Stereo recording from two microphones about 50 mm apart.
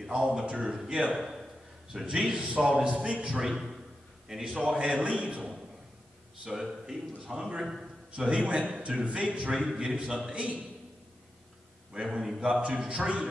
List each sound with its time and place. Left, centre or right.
0.0 s a man's voice: centre
4.6 s a man's voice: centre
6.4 s a man's voice: centre
11.9 s a man's voice: centre
12.2 s speech: centre
12.6 s a man's voice: right